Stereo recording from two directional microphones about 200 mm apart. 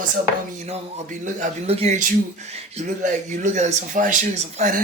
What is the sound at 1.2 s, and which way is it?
Speech, 35° right (ahead or behind).